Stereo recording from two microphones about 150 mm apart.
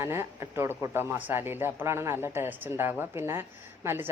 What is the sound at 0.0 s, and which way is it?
Speech, 20° right (ahead or behind).